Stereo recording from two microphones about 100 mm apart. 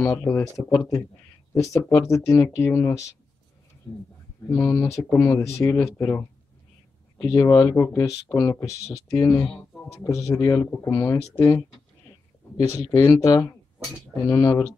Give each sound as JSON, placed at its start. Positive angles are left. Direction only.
{"t": 0.0, "sound": "speech", "side_deg": 30}
{"t": 4.5, "sound": "speech", "side_deg": 25}
{"t": 7.2, "sound": "speech", "side_deg": 30}